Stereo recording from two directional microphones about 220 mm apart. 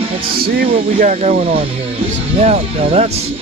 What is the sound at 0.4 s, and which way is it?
Speech, 40° right (ahead or behind).